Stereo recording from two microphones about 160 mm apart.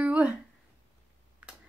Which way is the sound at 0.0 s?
10° right (ahead or behind).